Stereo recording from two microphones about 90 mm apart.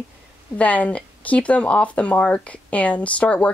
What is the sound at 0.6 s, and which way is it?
Speech, 15° left (ahead or behind).